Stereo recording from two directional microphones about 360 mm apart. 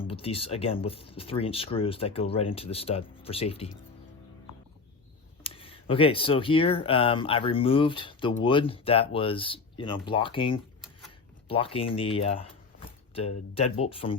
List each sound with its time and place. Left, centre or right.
0.0 s speech: centre
5.4 s speech: centre
13.5 s speech: centre